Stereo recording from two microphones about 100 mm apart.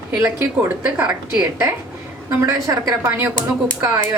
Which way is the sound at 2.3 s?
35° right (ahead or behind).